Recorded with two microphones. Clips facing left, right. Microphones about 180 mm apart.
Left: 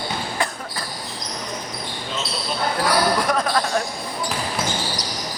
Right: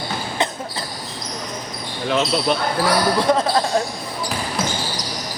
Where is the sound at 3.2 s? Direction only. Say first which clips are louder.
Right 4 dB; 25° right (ahead or behind).